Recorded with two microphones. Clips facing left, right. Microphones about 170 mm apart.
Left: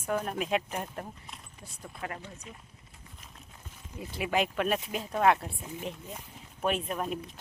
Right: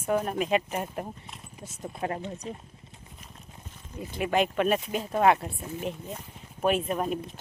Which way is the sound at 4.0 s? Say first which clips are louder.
Right 4 dB; 5° left (ahead or behind).